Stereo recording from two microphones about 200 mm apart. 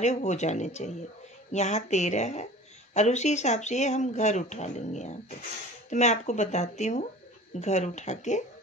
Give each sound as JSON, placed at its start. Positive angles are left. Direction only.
{"t": 0.0, "sound": "speech", "side_deg": 35}